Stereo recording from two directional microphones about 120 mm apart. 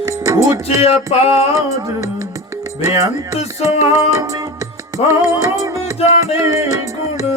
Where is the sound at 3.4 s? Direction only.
70° left (ahead or behind).